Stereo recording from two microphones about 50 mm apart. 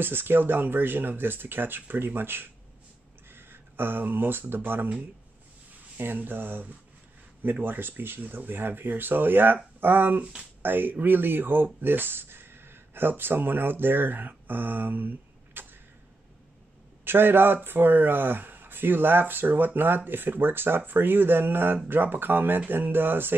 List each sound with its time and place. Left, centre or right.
0.0 s a man's voice: right
5.9 s a man's voice: right
17.0 s a man's voice: right